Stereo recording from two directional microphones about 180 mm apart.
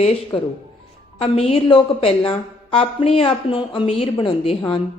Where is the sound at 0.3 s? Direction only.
25° left (ahead or behind).